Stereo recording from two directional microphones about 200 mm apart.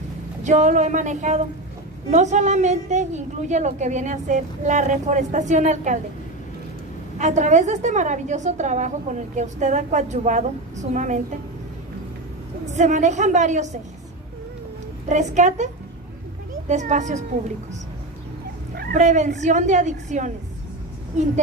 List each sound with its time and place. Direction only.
0.4 s a woman's voice: 35° right (ahead or behind)
7.2 s a woman's voice: 35° right (ahead or behind)
12.7 s a woman's voice: 35° right (ahead or behind)
15.0 s a woman's voice: 35° right (ahead or behind)
18.8 s a woman's voice: 40° right (ahead or behind)